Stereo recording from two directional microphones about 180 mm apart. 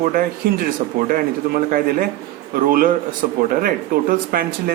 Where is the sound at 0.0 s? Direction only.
50° right (ahead or behind).